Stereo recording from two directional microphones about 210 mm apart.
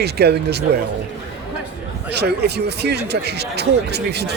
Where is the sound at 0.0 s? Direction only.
50° right (ahead or behind).